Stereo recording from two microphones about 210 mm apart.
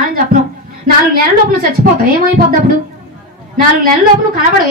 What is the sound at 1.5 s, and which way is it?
Speech, 45° right (ahead or behind).